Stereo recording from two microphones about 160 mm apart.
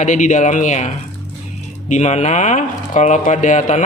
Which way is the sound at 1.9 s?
45° left (ahead or behind).